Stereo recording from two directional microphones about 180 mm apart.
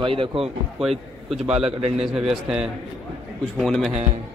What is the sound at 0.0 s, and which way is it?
Speech, 30° right (ahead or behind).